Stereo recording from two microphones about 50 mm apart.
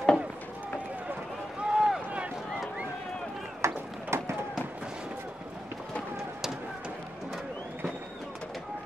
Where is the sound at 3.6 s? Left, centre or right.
Right.